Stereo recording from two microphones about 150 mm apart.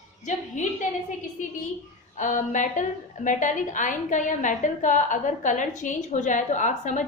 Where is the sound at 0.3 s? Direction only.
55° left (ahead or behind).